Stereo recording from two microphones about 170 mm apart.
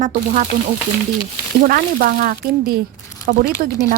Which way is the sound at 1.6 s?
60° right (ahead or behind).